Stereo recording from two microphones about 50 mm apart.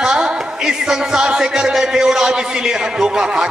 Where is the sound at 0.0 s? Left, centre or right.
Centre.